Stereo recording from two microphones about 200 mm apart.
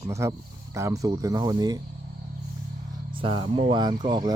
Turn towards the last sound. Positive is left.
turn(degrees=-20)  # may be behind; listen again after turning